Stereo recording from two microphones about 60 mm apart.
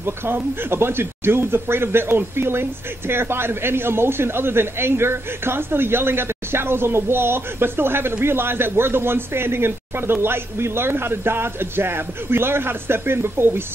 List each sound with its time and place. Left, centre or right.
0.0 s speech: right